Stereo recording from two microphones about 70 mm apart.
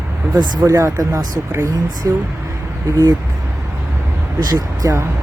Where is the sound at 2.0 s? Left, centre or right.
Right.